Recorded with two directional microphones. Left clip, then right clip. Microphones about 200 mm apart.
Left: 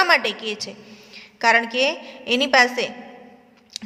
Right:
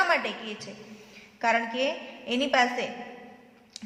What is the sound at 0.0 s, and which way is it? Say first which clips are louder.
A man's voice: left 7 dB; 35° left (ahead or behind).